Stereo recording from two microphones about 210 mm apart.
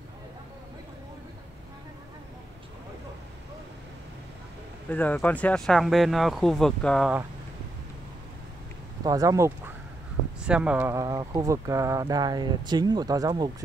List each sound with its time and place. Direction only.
4.8 s speech: 10° left (ahead or behind)
9.0 s speech: 15° right (ahead or behind)
10.4 s speech: 5° right (ahead or behind)